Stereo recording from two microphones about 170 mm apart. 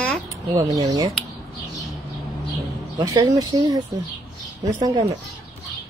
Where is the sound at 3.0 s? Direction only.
20° right (ahead or behind).